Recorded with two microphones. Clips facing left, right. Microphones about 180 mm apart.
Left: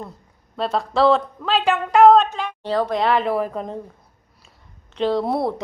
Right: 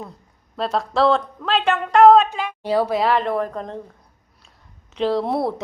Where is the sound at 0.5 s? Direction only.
Centre (ahead or behind).